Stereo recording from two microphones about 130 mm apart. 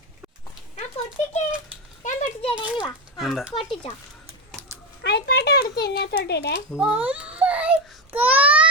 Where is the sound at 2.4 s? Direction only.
40° left (ahead or behind).